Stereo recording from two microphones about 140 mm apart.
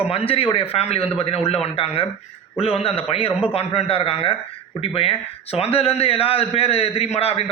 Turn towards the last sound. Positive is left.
turn(degrees=45)  # may be behind; listen again after turning